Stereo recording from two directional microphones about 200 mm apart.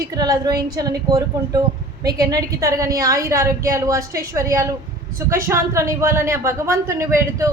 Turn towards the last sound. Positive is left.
turn(degrees=-15)  # may be behind; listen again after turning